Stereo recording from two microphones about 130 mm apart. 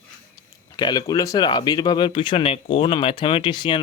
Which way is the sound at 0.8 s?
30° left (ahead or behind).